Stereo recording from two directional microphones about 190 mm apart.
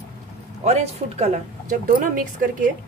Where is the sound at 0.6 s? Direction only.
35° right (ahead or behind).